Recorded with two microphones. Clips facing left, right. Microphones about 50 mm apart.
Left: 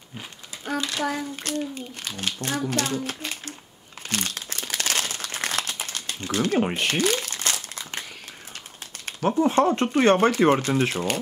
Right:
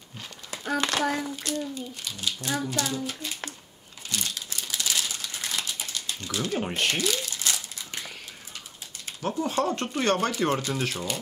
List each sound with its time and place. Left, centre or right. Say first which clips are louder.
0.7 s a child's voice: right 2 dB; right
1.0 s child singing: even; centre
1.6 s a child's voice: left 2 dB; left
4.1 s crumpling: left 3 dB; left
5.8 s typewriter: left 2 dB; left
6.7 s speech: left 1 dB; centre
7.0 s crumpling: left 5 dB; left
9.2 s a child's voice: left 7 dB; left